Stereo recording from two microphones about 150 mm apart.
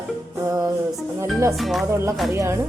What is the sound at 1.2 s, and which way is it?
Music, 20° right (ahead or behind).